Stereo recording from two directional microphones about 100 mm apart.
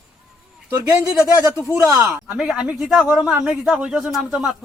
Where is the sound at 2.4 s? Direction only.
10° right (ahead or behind).